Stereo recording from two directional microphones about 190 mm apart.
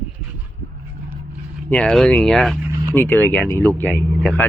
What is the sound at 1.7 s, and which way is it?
Speech, 5° left (ahead or behind).